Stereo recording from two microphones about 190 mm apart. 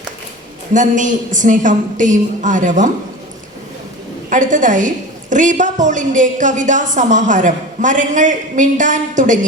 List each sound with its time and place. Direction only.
0.7 s a woman's voice: 40° right (ahead or behind)
4.3 s a woman's voice: 45° right (ahead or behind)